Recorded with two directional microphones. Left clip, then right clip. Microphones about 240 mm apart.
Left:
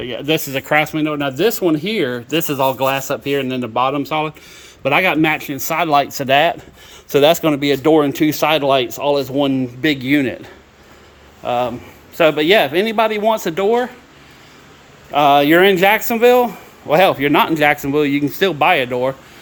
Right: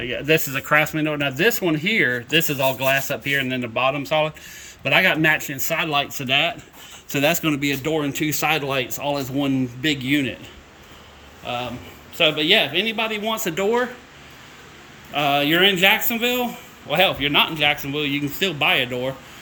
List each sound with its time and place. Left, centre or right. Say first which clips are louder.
0.0 s speech: left 1 dB; centre
7.1 s speech: left 8 dB; centre
11.4 s speech: left 9 dB; centre
15.1 s speech: left 8 dB; centre